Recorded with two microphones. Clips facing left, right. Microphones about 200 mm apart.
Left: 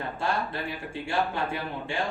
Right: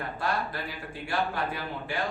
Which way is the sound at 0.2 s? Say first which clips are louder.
Left 2 dB; 25° left (ahead or behind).